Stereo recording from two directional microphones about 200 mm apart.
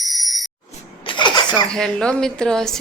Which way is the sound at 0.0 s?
Centre (ahead or behind).